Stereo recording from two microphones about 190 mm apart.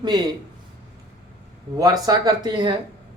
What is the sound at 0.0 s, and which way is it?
Speech, 25° right (ahead or behind).